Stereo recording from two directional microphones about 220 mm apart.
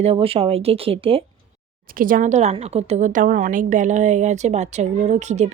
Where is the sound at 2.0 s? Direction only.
35° right (ahead or behind).